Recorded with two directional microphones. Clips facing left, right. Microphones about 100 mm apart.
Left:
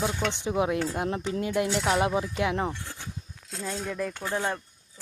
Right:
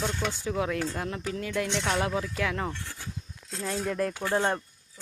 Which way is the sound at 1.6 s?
5° left (ahead or behind).